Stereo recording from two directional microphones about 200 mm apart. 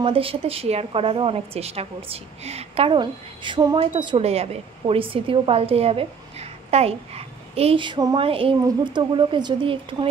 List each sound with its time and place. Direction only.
0.0 s a woman's voice: 30° right (ahead or behind)